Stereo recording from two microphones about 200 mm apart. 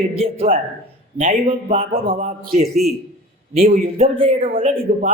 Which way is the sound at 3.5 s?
35° right (ahead or behind).